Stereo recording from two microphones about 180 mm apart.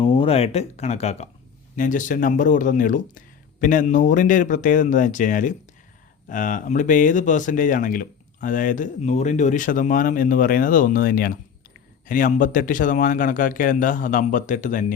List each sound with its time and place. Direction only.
0.0 s speech: 30° left (ahead or behind); by 14.9 s 45° left (ahead or behind)